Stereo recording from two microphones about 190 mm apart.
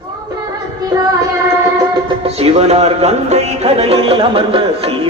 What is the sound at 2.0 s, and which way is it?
Music, 30° right (ahead or behind).